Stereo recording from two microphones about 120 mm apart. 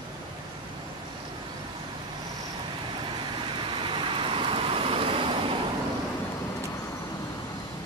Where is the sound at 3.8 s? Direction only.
45° right (ahead or behind).